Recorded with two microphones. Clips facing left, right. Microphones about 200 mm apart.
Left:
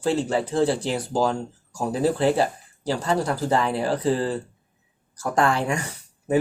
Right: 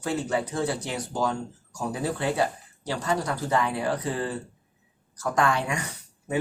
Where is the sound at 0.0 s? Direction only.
30° left (ahead or behind).